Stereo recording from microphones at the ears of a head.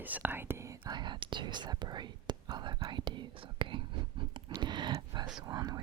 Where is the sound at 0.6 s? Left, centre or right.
Right.